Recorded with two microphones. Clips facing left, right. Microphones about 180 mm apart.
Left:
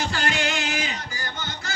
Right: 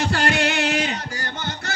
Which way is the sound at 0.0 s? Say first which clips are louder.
Right 5 dB; 65° right (ahead or behind).